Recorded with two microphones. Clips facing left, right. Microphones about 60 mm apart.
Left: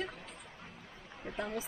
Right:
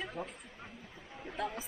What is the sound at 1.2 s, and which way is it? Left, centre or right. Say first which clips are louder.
Speech: right 1 dB; centre.